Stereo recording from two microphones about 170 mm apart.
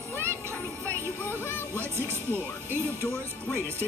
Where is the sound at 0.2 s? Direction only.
15° right (ahead or behind).